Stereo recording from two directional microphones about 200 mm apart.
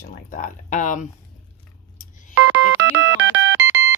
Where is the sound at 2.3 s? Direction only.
90° right.